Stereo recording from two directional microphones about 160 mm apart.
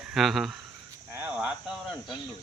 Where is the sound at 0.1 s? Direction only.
Centre (ahead or behind).